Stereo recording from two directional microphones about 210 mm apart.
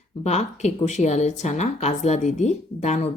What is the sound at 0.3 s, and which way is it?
Speech, 30° left (ahead or behind).